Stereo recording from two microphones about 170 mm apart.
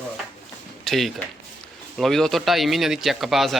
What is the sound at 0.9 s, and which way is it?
Speech, centre (ahead or behind).